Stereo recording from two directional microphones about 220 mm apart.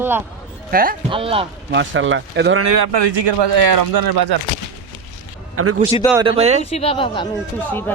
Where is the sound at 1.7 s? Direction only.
60° right (ahead or behind).